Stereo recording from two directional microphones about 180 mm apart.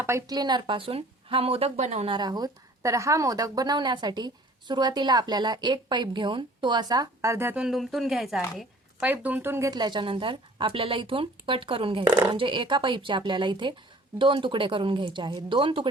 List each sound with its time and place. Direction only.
0.0 s speech: 15° right (ahead or behind); by 2.1 s 40° right (ahead or behind)
2.1 s a woman's voice: 25° right (ahead or behind)